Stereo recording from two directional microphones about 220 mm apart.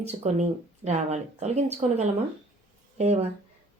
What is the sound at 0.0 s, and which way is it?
Speech, 30° right (ahead or behind).